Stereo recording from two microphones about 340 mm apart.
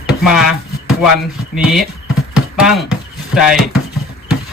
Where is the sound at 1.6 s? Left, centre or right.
Centre.